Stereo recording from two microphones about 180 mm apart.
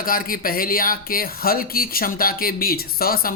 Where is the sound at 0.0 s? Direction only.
55° left (ahead or behind).